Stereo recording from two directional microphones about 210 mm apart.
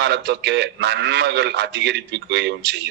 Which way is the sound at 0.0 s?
50° right (ahead or behind).